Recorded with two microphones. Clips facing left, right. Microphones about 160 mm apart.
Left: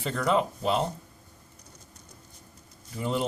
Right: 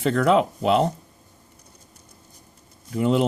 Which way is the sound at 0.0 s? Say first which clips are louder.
Right 7 dB; 65° right (ahead or behind).